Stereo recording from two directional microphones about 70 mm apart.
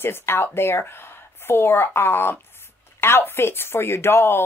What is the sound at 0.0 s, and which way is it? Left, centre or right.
Speech, left.